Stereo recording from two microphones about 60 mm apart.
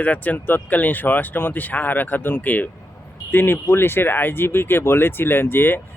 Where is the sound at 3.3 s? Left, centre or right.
Left.